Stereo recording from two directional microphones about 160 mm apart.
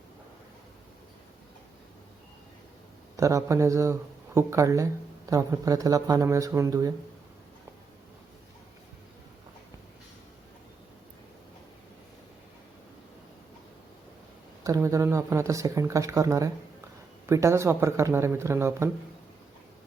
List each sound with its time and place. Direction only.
3.2 s a woman's voice: 20° right (ahead or behind)
14.6 s a woman's voice: 20° right (ahead or behind)